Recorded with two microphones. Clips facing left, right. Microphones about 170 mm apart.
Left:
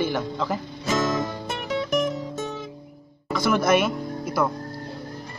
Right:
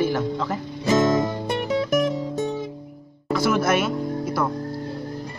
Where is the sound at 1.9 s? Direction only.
15° right (ahead or behind).